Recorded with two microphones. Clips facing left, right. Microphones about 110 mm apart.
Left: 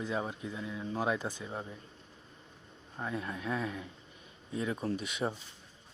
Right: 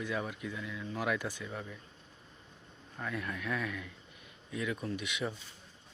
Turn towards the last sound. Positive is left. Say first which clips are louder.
# left 3 dB
turn(degrees=35)  # may be behind; listen again after turning